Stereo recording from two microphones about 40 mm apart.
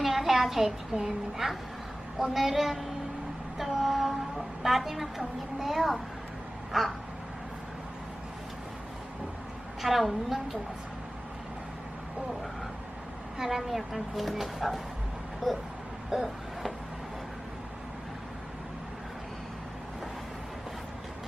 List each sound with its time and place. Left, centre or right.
0.0 s a sound: centre
0.9 s a child's voice: right
1.4 s a woman's voice: centre
9.8 s a woman's voice: centre
13.4 s a woman's voice: centre
16.0 s a sound: centre